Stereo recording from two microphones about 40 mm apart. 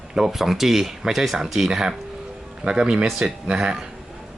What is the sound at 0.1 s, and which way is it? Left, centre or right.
Speech, centre.